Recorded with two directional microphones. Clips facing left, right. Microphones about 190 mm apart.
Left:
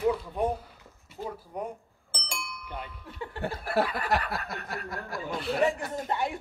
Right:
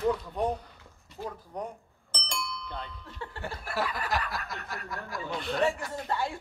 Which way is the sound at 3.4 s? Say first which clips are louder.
Left 5 dB; 60° left (ahead or behind).